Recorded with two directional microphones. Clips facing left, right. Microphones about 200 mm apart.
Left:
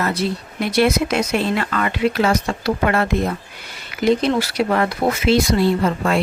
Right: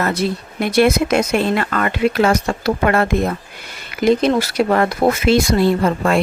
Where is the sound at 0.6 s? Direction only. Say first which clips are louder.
Right 3 dB; 50° right (ahead or behind).